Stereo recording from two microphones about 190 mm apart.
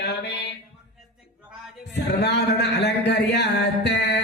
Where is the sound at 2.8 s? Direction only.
60° left (ahead or behind).